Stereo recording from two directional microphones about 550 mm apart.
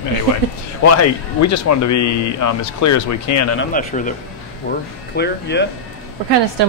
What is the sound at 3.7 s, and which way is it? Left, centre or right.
Speech, centre.